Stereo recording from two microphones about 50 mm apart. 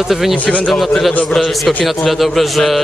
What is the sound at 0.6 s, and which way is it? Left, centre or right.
Speech, centre.